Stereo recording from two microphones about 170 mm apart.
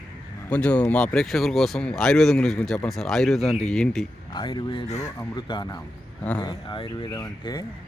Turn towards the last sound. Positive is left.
turn(degrees=25)  # may be behind; listen again after turning